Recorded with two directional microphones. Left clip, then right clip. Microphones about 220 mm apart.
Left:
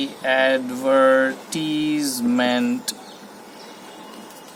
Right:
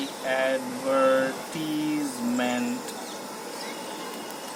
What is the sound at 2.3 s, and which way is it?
Speech, 45° left (ahead or behind).